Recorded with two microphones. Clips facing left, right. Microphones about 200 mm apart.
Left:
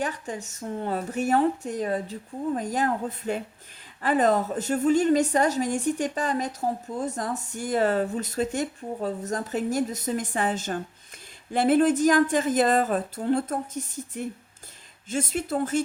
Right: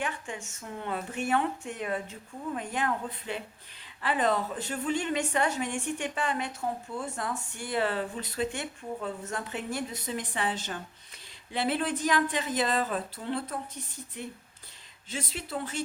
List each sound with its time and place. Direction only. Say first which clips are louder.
0.0 s a woman's voice: left 5 dB; 40° left (ahead or behind)